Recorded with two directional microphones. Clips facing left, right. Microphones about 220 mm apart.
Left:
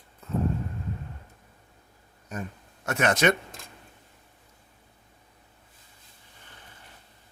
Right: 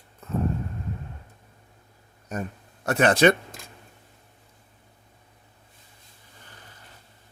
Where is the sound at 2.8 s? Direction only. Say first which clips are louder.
Right 5 dB; 35° right (ahead or behind).